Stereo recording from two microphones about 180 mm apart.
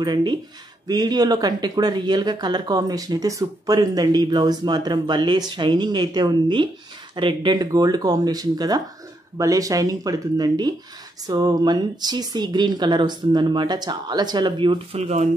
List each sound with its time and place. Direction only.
0.0 s speech: 25° right (ahead or behind)